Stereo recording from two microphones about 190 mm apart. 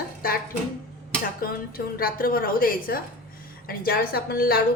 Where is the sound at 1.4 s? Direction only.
50° left (ahead or behind).